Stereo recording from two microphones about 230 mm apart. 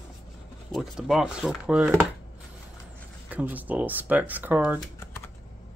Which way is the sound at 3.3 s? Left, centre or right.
Centre.